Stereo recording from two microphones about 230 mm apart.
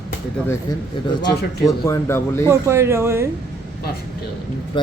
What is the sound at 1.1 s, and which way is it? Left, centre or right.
A man's voice, centre.